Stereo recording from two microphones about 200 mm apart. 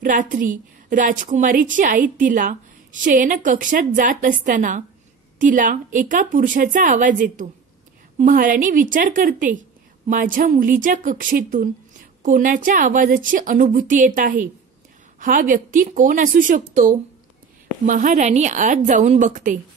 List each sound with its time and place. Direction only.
0.0 s a woman's voice: 40° right (ahead or behind)